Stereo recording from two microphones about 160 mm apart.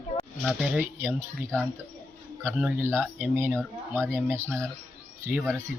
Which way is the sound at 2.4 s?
10° right (ahead or behind).